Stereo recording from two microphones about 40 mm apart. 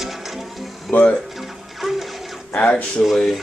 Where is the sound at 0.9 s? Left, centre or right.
Left.